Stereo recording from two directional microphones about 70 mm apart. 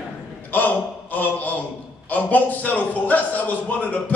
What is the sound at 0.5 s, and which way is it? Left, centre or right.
A man's voice, left.